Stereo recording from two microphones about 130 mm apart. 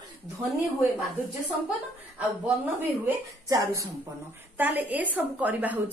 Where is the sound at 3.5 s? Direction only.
25° right (ahead or behind).